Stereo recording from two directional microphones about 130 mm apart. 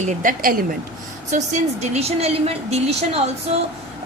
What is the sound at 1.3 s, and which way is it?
A woman's voice, 70° right (ahead or behind).